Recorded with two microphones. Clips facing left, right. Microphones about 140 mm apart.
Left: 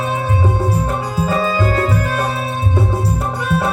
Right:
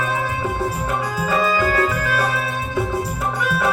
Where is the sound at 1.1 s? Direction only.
30° left (ahead or behind).